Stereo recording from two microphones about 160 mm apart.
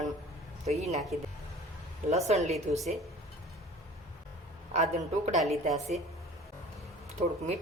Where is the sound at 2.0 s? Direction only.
40° right (ahead or behind).